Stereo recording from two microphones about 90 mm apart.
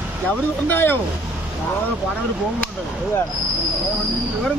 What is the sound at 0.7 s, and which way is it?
Speech, 25° left (ahead or behind).